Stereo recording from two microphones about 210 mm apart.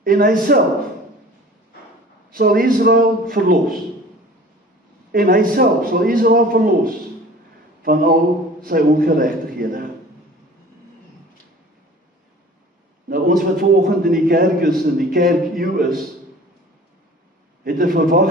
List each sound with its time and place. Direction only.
0.0 s a man's voice: 40° right (ahead or behind)
2.3 s a man's voice: 45° right (ahead or behind)
5.1 s a man's voice: 45° right (ahead or behind)
13.1 s a man's voice: 45° right (ahead or behind)
17.6 s a man's voice: 45° right (ahead or behind)